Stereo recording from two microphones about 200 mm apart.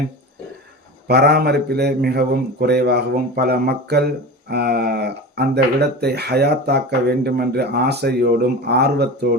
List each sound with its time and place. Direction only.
1.0 s speech: 55° right (ahead or behind)